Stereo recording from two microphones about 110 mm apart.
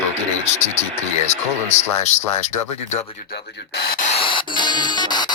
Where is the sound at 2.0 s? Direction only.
90° left.